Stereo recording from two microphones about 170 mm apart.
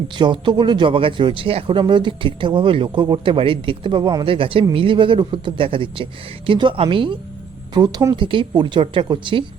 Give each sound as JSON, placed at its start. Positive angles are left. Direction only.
{"t": 0.2, "sound": "speech", "side_deg": -30}